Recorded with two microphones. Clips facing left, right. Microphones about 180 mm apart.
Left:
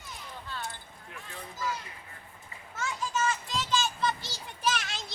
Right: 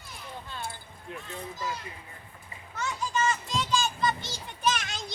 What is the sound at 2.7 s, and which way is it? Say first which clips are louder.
Children playing: right 2 dB; centre (ahead or behind).